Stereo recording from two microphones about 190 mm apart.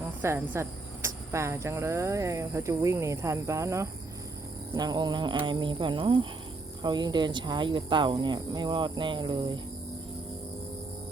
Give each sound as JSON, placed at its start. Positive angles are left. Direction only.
{"t": 0.2, "sound": "cricket", "side_deg": -10}
{"t": 4.7, "sound": "speech", "side_deg": -20}